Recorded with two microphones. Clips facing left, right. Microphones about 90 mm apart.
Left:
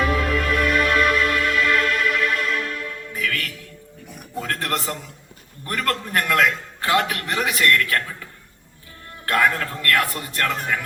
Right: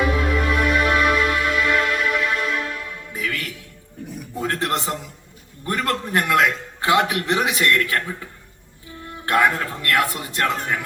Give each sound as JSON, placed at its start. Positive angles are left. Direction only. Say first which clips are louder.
{"t": 0.0, "sound": "music", "louder": "even", "side_deg": -25}
{"t": 4.4, "sound": "a sound", "louder": "right 3 dB", "side_deg": -25}
{"t": 6.8, "sound": "a man's voice", "louder": "right 3 dB", "side_deg": -25}
{"t": 9.2, "sound": "a man's voice", "louder": "right 1 dB", "side_deg": -25}